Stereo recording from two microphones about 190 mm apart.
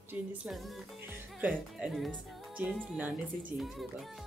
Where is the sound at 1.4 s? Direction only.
5° right (ahead or behind).